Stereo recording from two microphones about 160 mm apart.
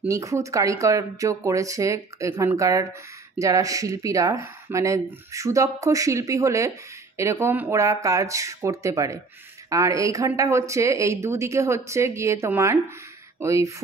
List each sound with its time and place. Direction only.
0.1 s speech: 20° right (ahead or behind)